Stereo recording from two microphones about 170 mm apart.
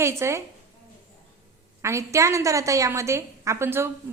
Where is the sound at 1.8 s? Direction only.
15° right (ahead or behind).